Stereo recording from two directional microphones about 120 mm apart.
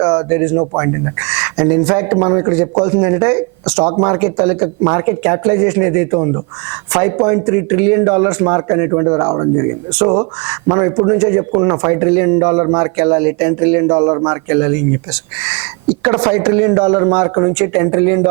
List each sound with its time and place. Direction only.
0.0 s speech: 30° right (ahead or behind)
3.7 s speech: 15° right (ahead or behind)
3.9 s speech: 25° right (ahead or behind)
16.0 s speech: 20° right (ahead or behind)